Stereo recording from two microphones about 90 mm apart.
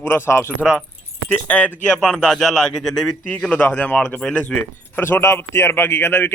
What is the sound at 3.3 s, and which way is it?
Speech, 15° left (ahead or behind).